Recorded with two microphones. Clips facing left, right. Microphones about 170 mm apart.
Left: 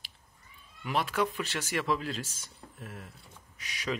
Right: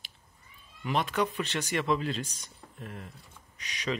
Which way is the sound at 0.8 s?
Centre (ahead or behind).